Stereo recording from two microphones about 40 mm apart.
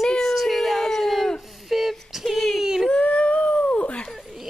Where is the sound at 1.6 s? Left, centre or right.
Centre.